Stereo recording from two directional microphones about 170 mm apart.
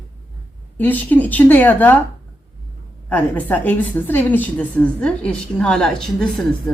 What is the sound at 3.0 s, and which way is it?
A woman's voice, 10° left (ahead or behind).